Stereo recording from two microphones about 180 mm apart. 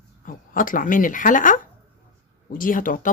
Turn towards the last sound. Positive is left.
turn(degrees=50)  # may be behind; listen again after turning